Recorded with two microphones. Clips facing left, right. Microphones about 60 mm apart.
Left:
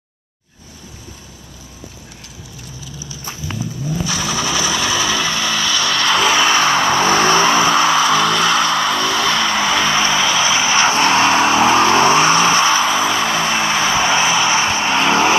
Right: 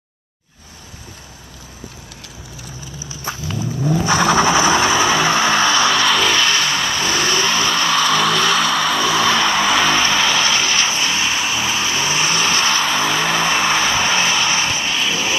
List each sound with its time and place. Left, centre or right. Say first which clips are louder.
4.0 s vehicle: right 8 dB; right
6.0 s music: left 1 dB; centre
6.3 s vehicle: left 3 dB; centre
6.6 s vehicle: left 6 dB; left
8.0 s music: left 2 dB; centre
10.6 s vehicle: left 4 dB; left
10.9 s vehicle: left 7 dB; left; by 12.8 s centre
12.8 s vehicle: left 2 dB; centre; by 15.3 s left